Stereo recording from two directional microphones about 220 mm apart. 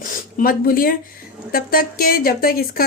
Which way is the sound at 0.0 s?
40° left (ahead or behind).